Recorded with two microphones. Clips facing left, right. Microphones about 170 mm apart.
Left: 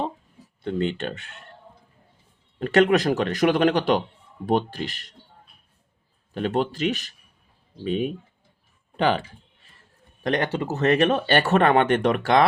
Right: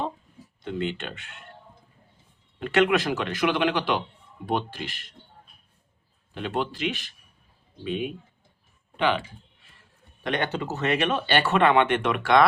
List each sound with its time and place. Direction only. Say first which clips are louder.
0.6 s speech: left 4 dB; 40° left (ahead or behind)
2.6 s speech: left 3 dB; 40° left (ahead or behind)
6.3 s speech: left 5 dB; 40° left (ahead or behind)
10.2 s speech: left 3 dB; 40° left (ahead or behind)